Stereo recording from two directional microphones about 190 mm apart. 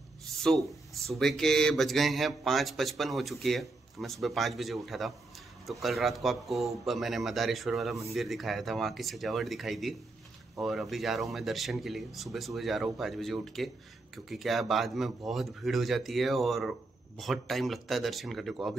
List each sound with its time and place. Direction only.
0.4 s speech: centre (ahead or behind)